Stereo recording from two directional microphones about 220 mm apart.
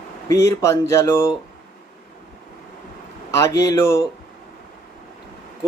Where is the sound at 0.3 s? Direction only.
15° left (ahead or behind).